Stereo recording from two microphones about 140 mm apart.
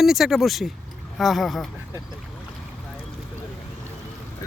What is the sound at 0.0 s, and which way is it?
Speech, centre (ahead or behind).